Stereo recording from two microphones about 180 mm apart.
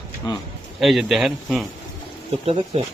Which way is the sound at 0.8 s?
Centre (ahead or behind).